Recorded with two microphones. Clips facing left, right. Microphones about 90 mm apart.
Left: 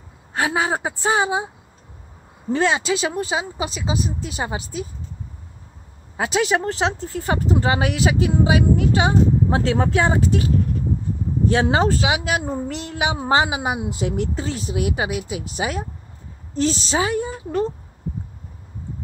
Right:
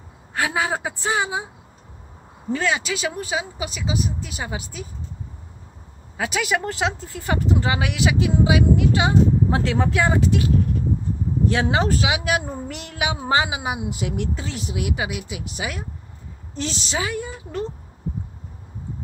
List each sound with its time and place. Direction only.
0.3 s a woman's voice: 25° left (ahead or behind)
2.5 s speech: 30° left (ahead or behind)
6.1 s speech: 30° left (ahead or behind)
11.5 s speech: 30° left (ahead or behind)